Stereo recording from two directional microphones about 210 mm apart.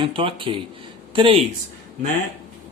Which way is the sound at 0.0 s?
25° right (ahead or behind).